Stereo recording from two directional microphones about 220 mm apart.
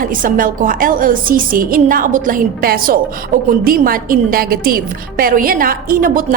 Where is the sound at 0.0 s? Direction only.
40° right (ahead or behind).